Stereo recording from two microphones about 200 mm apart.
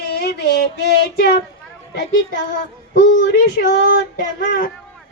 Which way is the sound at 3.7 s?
50° left (ahead or behind).